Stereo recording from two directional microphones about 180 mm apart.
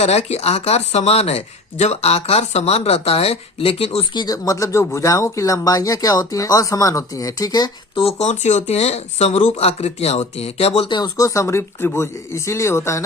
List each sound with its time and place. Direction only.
0.0 s speech: 35° left (ahead or behind); by 13.1 s 15° left (ahead or behind)